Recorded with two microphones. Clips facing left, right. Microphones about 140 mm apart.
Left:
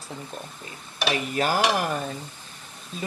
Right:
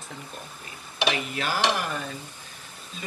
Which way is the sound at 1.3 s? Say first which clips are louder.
Left 4 dB; 45° left (ahead or behind).